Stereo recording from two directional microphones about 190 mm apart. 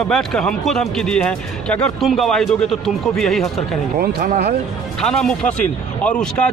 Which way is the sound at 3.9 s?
50° right (ahead or behind).